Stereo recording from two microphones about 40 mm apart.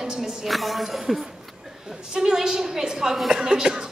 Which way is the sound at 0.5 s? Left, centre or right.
Centre.